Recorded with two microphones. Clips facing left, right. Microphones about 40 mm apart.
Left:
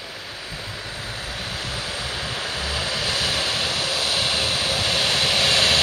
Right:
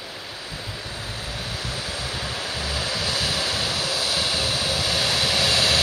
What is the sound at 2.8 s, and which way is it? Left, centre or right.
Vehicle, left.